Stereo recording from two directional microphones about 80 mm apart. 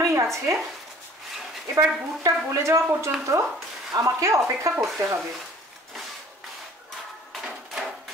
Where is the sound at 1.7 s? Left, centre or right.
Right.